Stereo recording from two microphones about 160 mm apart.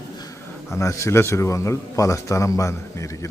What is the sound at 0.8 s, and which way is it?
A man's voice, 20° left (ahead or behind).